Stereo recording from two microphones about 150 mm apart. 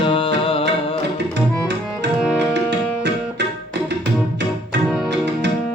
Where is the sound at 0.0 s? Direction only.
35° left (ahead or behind).